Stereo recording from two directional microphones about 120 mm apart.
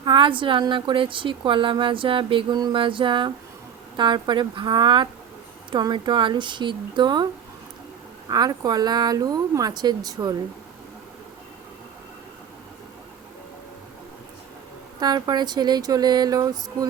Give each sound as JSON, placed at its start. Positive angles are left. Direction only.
{"t": 0.0, "sound": "a woman's voice", "side_deg": -45}
{"t": 8.3, "sound": "speech", "side_deg": -35}
{"t": 14.9, "sound": "speech", "side_deg": -35}